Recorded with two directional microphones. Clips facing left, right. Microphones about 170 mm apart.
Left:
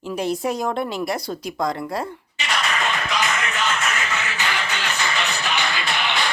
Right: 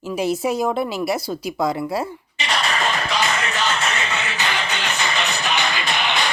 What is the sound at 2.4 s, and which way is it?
Music, 30° right (ahead or behind).